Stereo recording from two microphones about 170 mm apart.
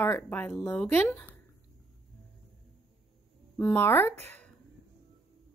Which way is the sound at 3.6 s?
10° left (ahead or behind).